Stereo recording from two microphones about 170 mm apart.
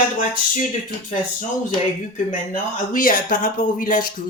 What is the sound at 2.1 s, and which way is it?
Speech, 50° left (ahead or behind).